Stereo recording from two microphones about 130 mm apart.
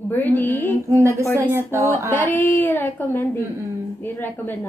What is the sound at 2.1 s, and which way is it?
A woman's voice, 15° left (ahead or behind).